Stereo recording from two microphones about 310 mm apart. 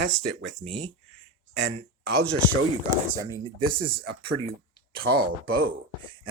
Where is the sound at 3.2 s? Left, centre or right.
Centre.